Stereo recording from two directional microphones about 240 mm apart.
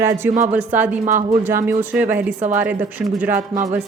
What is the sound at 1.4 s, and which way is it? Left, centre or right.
Speech, centre.